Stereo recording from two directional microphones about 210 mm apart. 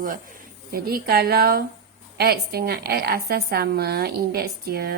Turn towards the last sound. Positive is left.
turn(degrees=-50)  # may be behind; listen again after turning